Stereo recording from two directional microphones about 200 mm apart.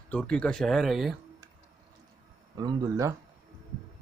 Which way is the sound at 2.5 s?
20° right (ahead or behind).